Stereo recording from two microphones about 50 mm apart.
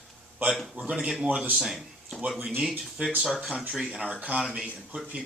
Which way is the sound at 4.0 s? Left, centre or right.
Centre.